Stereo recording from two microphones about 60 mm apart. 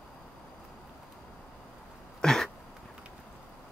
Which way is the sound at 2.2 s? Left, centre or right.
Centre.